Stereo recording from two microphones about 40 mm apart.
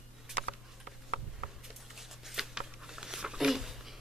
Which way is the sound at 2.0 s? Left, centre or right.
Centre.